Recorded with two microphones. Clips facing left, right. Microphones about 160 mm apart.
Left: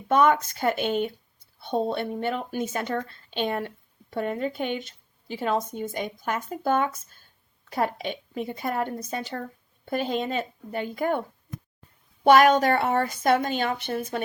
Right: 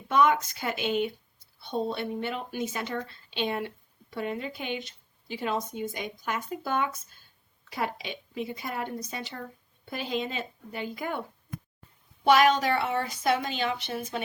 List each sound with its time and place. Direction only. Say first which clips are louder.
0.1 s a woman's voice: left 3 dB; 50° left (ahead or behind)
12.2 s a woman's voice: left 4 dB; 50° left (ahead or behind)